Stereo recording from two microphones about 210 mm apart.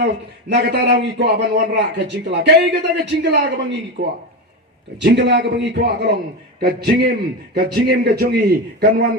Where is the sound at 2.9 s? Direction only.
55° right (ahead or behind).